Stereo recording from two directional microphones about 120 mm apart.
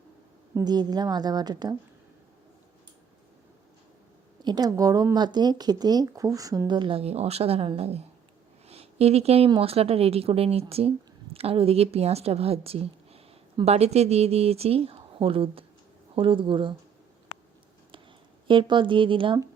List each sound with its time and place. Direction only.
0.6 s speech: 35° right (ahead or behind)
4.4 s a woman's voice: 35° right (ahead or behind); by 8.0 s 55° right (ahead or behind)
8.6 s a sound: 60° right (ahead or behind)
9.6 s a woman's voice: 55° right (ahead or behind)
18.4 s speech: 45° right (ahead or behind)